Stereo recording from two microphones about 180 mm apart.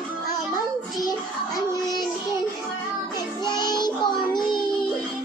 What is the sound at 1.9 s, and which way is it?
Child singing, 25° left (ahead or behind).